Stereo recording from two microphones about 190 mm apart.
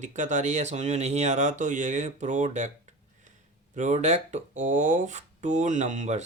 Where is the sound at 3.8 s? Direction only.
40° right (ahead or behind).